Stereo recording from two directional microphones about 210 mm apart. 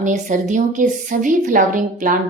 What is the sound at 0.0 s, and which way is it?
Speech, 35° right (ahead or behind).